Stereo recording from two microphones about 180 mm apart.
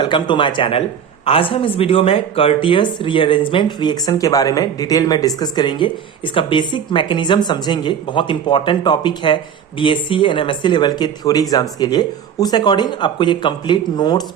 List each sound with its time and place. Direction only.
0.0 s speech: 25° left (ahead or behind)